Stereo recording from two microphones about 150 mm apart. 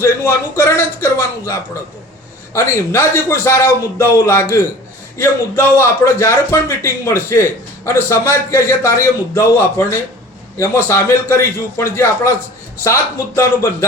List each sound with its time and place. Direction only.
0.0 s a man's voice: 15° left (ahead or behind)